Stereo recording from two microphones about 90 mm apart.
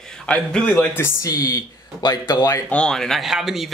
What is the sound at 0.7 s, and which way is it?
Speech, 25° left (ahead or behind).